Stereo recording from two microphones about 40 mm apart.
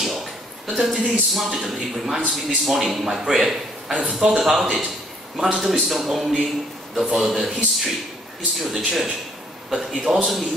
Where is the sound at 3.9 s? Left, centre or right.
Right.